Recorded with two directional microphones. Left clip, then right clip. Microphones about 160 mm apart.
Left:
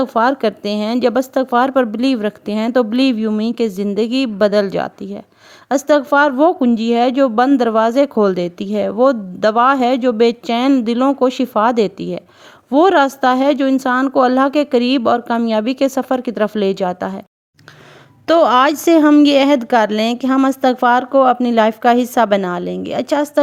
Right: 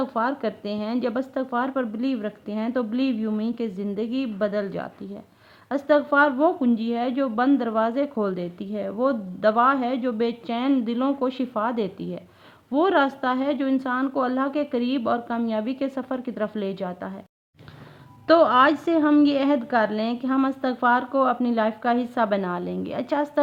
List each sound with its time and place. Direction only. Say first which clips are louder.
0.0 s speech: left 10 dB; 55° left (ahead or behind)
18.3 s speech: left 6 dB; 60° left (ahead or behind); by 23.4 s 40° left (ahead or behind)